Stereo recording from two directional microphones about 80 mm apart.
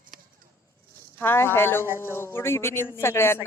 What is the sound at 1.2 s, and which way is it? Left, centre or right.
Speech, left.